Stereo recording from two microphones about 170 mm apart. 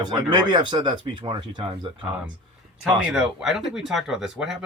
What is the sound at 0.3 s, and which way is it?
Speech, 25° right (ahead or behind).